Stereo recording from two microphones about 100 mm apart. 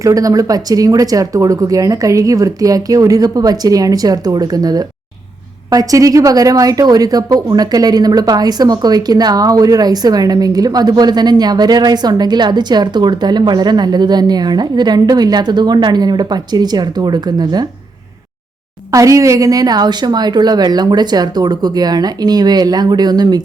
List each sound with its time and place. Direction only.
0.0 s speech: 35° right (ahead or behind)
18.9 s speech: 35° right (ahead or behind)